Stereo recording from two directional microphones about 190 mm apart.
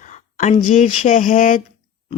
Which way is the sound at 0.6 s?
40° left (ahead or behind).